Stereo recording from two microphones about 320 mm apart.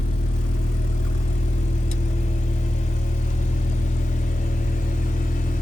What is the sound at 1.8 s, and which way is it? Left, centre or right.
Vehicle, left.